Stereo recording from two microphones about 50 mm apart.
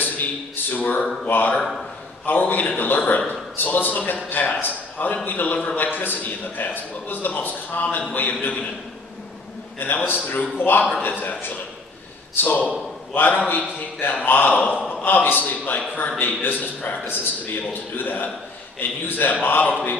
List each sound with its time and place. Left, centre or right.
0.0 s a man's voice: left
9.8 s a man's voice: left
12.4 s a man's voice: left